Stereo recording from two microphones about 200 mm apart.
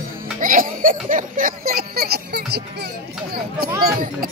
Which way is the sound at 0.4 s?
45° right (ahead or behind).